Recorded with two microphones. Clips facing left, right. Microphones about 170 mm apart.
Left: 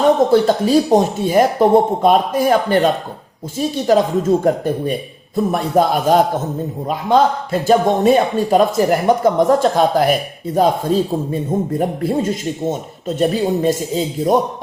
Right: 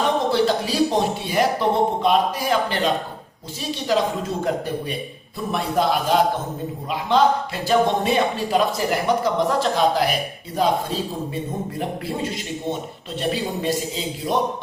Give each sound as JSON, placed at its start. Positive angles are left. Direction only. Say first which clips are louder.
{"t": 0.3, "sound": "speech", "louder": "left 7 dB", "side_deg": 45}
{"t": 11.8, "sound": "speech", "louder": "left 8 dB", "side_deg": 45}